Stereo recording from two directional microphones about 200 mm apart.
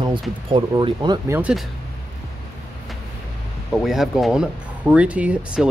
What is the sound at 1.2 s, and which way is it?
Speech, 10° right (ahead or behind).